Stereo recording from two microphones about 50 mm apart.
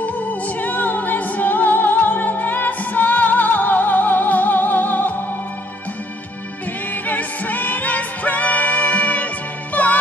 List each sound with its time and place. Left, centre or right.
0.0 s music: left
7.1 s music: left